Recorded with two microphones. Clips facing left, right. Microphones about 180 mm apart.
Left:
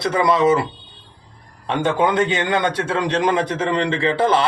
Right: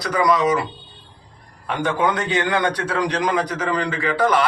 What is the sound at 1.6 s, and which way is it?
A man's voice, 25° left (ahead or behind).